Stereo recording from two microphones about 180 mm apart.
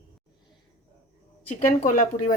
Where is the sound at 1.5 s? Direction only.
45° left (ahead or behind).